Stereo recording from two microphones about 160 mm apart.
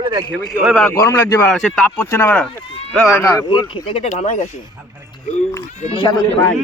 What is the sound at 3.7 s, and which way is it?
Speech, 35° left (ahead or behind).